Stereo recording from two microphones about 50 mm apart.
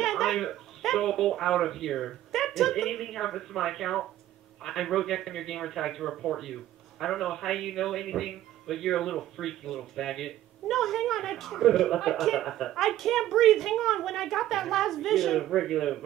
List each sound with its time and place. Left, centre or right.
0.0 s a man's voice: centre